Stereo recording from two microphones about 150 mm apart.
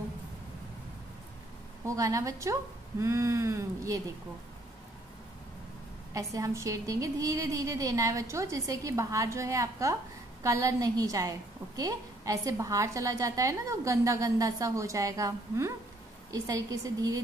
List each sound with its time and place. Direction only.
1.9 s a woman's voice: 20° right (ahead or behind)
6.1 s a woman's voice: 20° right (ahead or behind)